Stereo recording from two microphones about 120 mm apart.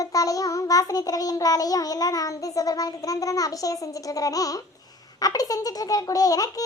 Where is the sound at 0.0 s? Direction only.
30° left (ahead or behind).